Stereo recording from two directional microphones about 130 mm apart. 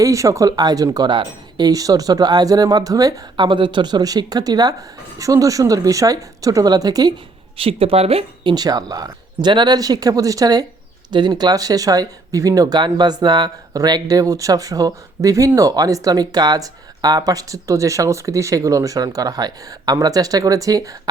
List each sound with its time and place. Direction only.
0.0 s speech: 25° right (ahead or behind)
7.5 s speech: 45° right (ahead or behind)
8.5 s speech: 30° right (ahead or behind)